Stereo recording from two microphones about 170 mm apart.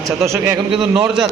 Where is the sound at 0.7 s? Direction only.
30° right (ahead or behind).